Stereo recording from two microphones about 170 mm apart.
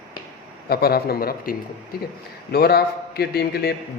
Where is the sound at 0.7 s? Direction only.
65° left (ahead or behind).